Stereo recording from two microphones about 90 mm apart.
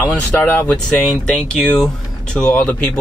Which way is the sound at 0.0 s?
15° left (ahead or behind).